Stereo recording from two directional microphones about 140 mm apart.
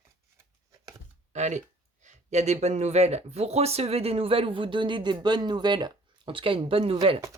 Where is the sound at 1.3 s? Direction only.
55° right (ahead or behind).